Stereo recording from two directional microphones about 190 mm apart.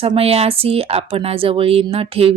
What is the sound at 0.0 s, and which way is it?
A woman's voice, 30° right (ahead or behind).